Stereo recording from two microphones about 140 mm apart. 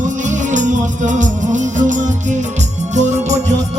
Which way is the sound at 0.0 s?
60° right (ahead or behind).